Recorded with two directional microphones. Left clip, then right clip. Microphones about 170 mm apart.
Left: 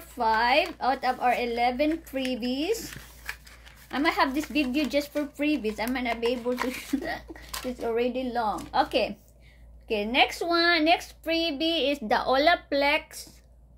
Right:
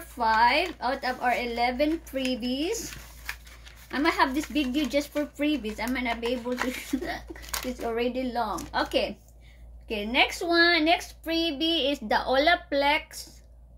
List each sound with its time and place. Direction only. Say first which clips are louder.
0.2 s a woman's voice: right 1 dB; 35° left (ahead or behind)
3.9 s a woman's voice: even; 40° left (ahead or behind)
7.8 s a woman's voice: left 2 dB; 30° left (ahead or behind)